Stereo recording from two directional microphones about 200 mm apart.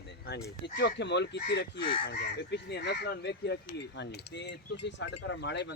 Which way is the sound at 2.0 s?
55° left (ahead or behind).